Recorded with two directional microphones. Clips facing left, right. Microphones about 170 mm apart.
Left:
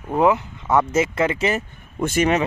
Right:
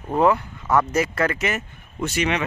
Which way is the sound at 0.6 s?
25° left (ahead or behind).